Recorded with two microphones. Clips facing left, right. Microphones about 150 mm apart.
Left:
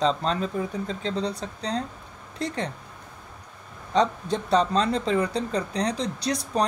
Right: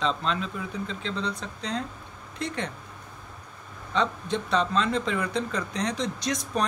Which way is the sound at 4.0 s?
40° left (ahead or behind).